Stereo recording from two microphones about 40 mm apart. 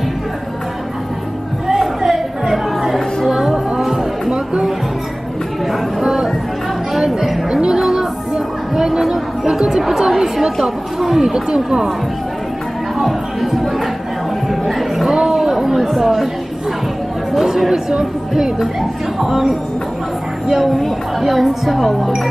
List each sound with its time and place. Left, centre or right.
1.7 s music: centre
4.3 s music: centre
5.7 s a sound: centre
6.9 s chatter: centre
7.8 s music: centre
8.7 s chatter: centre
13.0 s a sound: centre
15.1 s chatter: centre
17.6 s speech: centre